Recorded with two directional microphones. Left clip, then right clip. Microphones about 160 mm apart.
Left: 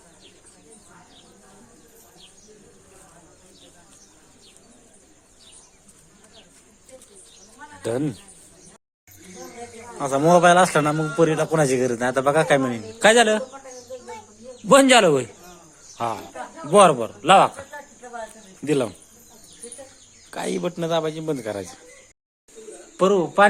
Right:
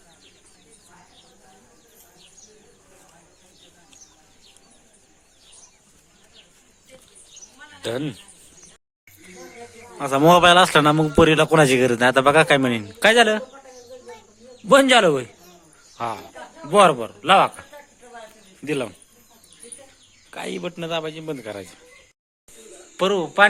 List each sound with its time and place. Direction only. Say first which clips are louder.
7.8 s speech: left 2 dB; centre (ahead or behind)
10.2 s a man's voice: right 2 dB; 40° right (ahead or behind); by 13.4 s 25° right (ahead or behind)
14.7 s a man's voice: even; 5° right (ahead or behind)
18.6 s a man's voice: left 3 dB; centre (ahead or behind)
20.3 s a man's voice: left 3 dB; centre (ahead or behind)
23.0 s speech: even; 10° left (ahead or behind)